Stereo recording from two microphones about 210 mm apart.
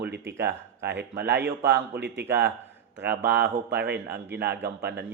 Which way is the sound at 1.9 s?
55° right (ahead or behind).